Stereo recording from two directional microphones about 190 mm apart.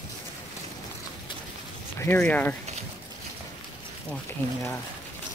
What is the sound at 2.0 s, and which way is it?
Speech, 10° left (ahead or behind).